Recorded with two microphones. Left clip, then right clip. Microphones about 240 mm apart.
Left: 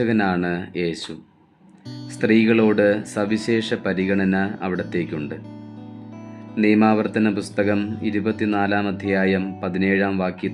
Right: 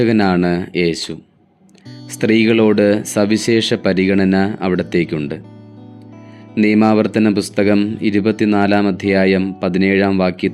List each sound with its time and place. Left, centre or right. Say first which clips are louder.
0.0 s speech: right 6 dB; right
2.1 s speech: right 4 dB; right
6.5 s speech: right 4 dB; right